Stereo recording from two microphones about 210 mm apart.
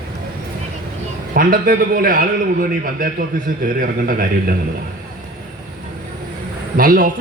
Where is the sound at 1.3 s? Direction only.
45° right (ahead or behind).